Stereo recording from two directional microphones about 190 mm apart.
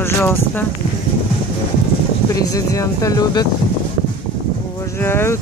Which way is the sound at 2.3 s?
20° left (ahead or behind).